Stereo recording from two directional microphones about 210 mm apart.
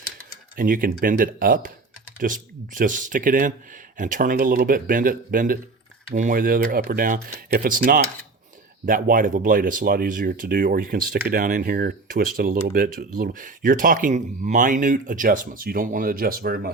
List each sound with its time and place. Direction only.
0.5 s speech: 40° right (ahead or behind)